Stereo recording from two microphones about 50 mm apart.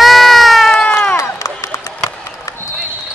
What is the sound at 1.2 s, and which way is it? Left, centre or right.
Run, left.